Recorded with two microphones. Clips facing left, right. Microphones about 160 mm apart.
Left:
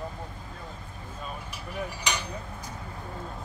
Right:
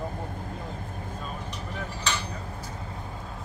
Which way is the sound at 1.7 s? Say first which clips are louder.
Left 1 dB; 15° left (ahead or behind).